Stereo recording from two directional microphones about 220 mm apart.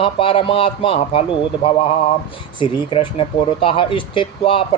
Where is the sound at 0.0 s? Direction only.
25° left (ahead or behind).